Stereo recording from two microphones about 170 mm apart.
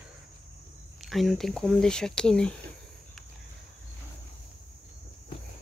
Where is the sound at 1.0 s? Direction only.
Centre (ahead or behind).